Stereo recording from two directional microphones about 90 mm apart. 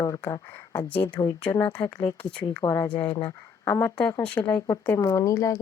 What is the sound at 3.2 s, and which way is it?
Speech, 30° left (ahead or behind).